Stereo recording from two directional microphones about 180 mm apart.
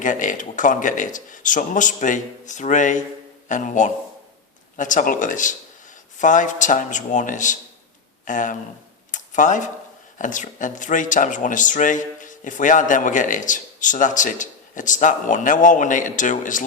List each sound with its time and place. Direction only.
0.0 s speech: 45° left (ahead or behind)
9.1 s a sound: 45° left (ahead or behind)
10.2 s speech: 45° left (ahead or behind)